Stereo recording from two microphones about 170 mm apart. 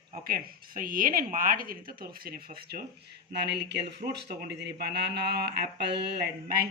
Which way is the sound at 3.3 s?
80° right.